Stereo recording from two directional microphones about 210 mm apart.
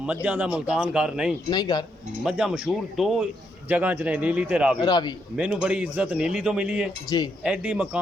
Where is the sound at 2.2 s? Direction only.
5° right (ahead or behind).